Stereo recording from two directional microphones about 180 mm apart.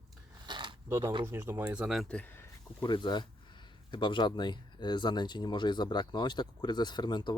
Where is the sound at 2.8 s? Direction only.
25° left (ahead or behind).